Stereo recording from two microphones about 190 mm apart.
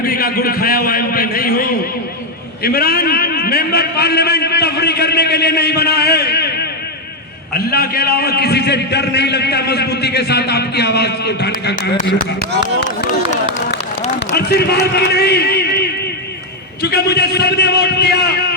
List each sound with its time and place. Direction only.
0.0 s a man's voice: 50° left (ahead or behind)
14.3 s a man's voice: 60° left (ahead or behind)
16.8 s a man's voice: 60° left (ahead or behind)